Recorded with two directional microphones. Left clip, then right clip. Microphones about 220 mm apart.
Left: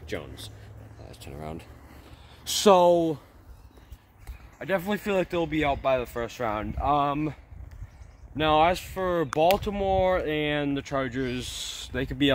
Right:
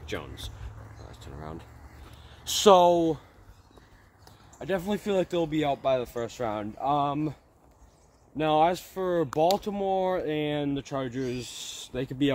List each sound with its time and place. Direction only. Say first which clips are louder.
0.0 s speech: left 1 dB; 15° left (ahead or behind)
1.1 s speech: left 3 dB; 45° left (ahead or behind)
2.4 s speech: even; 20° left (ahead or behind)
4.6 s speech: left 2 dB; 10° left (ahead or behind)
4.8 s speech: left 1 dB; 5° right (ahead or behind)
6.8 s speech: left 2 dB; 10° left (ahead or behind)
8.4 s speech: left 2 dB; 10° left (ahead or behind)